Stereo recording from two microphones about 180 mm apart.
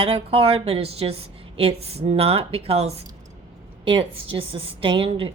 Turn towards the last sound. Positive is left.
turn(degrees=-30)  # may be behind; listen again after turning